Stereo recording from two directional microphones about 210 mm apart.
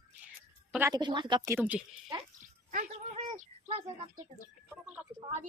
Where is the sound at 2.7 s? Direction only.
35° right (ahead or behind).